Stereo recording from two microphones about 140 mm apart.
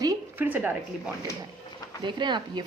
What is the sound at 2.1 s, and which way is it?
Speech, 35° right (ahead or behind).